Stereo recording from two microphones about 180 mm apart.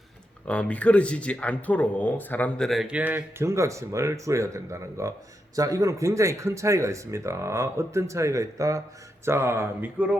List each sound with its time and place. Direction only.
0.4 s speech: 5° left (ahead or behind); by 10.2 s 10° right (ahead or behind)